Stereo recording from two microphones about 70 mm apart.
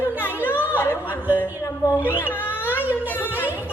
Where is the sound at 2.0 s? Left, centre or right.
Left.